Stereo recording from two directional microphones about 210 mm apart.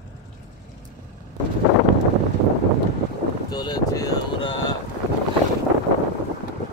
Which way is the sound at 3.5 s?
20° left (ahead or behind).